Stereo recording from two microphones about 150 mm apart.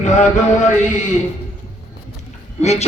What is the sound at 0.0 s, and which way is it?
Mantra, 55° left (ahead or behind).